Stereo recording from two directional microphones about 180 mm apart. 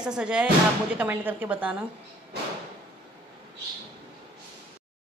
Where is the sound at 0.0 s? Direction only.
5° right (ahead or behind).